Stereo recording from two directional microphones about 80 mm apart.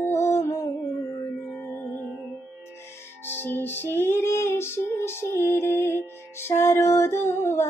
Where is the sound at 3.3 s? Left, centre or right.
Left.